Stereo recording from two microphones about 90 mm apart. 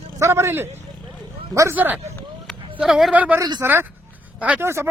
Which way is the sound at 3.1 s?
20° right (ahead or behind).